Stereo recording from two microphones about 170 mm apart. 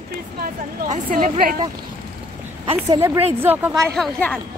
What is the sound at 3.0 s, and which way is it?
Speech, 15° right (ahead or behind).